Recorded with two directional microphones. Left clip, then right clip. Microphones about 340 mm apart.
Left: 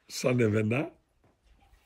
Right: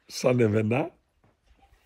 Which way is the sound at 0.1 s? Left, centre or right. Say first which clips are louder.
Right 4 dB; centre.